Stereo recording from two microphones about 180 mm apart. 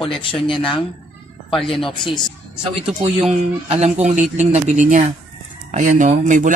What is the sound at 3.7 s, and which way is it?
Speech, 40° right (ahead or behind).